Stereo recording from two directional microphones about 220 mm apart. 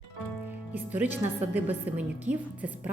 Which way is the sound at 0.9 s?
10° right (ahead or behind).